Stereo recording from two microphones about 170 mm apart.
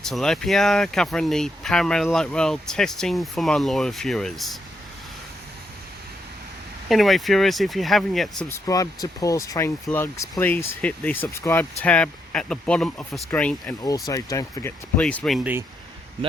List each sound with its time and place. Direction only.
0.0 s speech: 5° left (ahead or behind)
6.8 s speech: centre (ahead or behind)
8.4 s speech: 15° left (ahead or behind)
13.8 s speech: 20° left (ahead or behind)
14.9 s speech: 5° left (ahead or behind)